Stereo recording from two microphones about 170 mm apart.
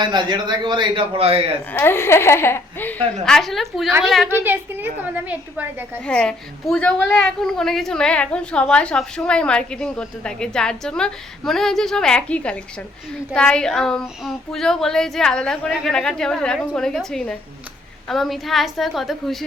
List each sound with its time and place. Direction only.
0.0 s a man's voice: 25° right (ahead or behind)
1.7 s speech: 15° left (ahead or behind)
3.2 s a woman's voice: centre (ahead or behind)
4.3 s a woman's voice: 10° right (ahead or behind)
6.1 s a woman's voice: 5° left (ahead or behind)